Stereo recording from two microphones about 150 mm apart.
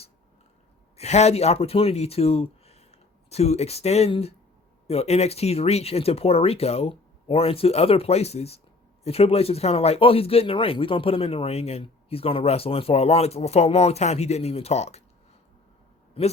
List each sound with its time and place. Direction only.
0.9 s speech: 45° left (ahead or behind)